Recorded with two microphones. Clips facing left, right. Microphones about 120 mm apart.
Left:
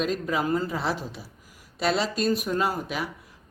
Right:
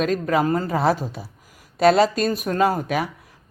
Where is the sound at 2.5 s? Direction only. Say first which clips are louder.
Right 6 dB; 65° right (ahead or behind).